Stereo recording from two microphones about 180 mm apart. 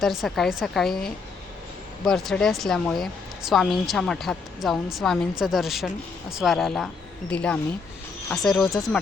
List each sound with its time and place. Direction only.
0.0 s speech: centre (ahead or behind)